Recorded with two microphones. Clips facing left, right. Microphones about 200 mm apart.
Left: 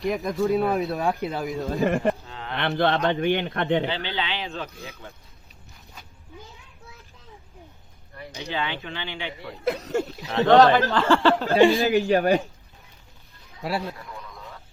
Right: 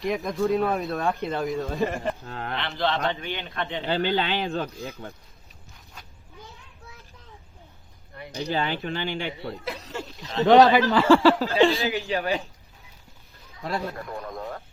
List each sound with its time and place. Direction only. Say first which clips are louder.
0.0 s speech: left 1 dB; centre (ahead or behind)
2.2 s a sound: right 2 dB; 50° right (ahead or behind)
2.6 s a man's voice: left 5 dB; 55° left (ahead or behind)
3.8 s speech: right 4 dB; 45° right (ahead or behind)
8.4 s speech: right 3 dB; 40° right (ahead or behind)
9.6 s speech: left 9 dB; 50° left (ahead or behind)
10.4 s speech: even; 15° right (ahead or behind)
11.8 s a man's voice: left 7 dB; 45° left (ahead or behind)
13.6 s a man's voice: left 2 dB; 10° left (ahead or behind)
13.9 s a sound: right 7 dB; 50° right (ahead or behind)